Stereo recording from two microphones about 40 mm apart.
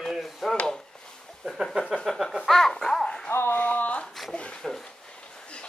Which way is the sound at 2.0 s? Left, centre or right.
Centre.